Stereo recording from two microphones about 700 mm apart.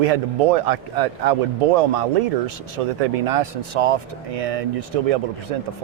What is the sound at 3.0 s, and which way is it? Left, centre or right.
Speech, right.